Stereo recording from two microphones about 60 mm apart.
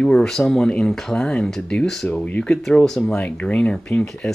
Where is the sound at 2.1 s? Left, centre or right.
Centre.